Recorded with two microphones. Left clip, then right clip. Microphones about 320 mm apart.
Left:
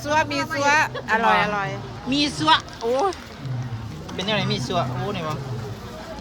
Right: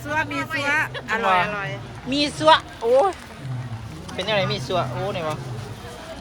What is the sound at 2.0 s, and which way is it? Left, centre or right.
Speech, centre.